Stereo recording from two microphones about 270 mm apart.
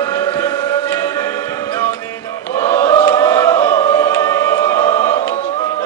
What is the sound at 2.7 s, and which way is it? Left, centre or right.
Choir, centre.